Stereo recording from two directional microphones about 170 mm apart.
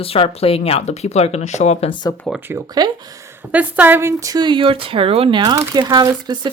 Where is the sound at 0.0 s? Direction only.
35° left (ahead or behind).